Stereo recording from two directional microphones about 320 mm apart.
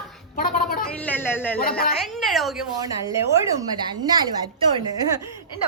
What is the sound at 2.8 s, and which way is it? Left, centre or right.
A woman's voice, centre.